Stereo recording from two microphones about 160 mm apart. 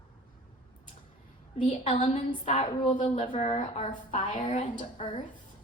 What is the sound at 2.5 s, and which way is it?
Speech, 40° left (ahead or behind).